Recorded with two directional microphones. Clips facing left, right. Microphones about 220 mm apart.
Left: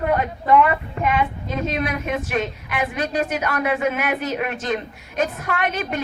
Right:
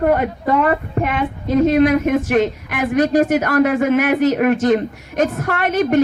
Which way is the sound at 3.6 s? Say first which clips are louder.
Right 7 dB; 50° right (ahead or behind).